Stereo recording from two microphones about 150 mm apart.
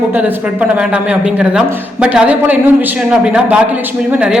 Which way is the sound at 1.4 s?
5° right (ahead or behind).